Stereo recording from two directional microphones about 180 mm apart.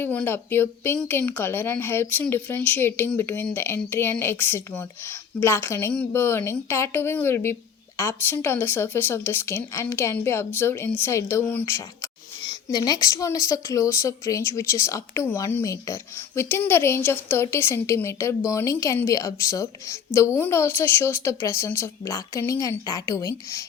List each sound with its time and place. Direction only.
0.0 s a woman's voice: 10° left (ahead or behind)